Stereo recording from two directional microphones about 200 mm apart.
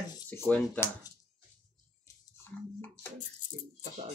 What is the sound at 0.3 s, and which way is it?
Speech, 10° left (ahead or behind).